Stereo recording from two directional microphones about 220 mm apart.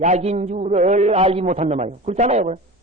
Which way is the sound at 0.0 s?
30° right (ahead or behind).